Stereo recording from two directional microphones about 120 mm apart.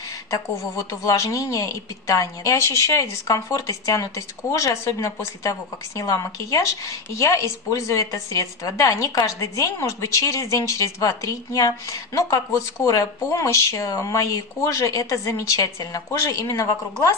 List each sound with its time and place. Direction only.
0.3 s a woman's voice: 25° left (ahead or behind)